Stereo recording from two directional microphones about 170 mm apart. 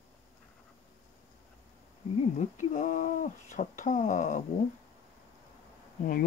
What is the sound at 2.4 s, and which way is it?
Speech, 45° left (ahead or behind).